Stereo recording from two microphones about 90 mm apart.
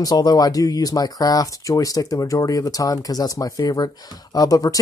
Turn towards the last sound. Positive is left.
turn(degrees=40)  # may be behind; listen again after turning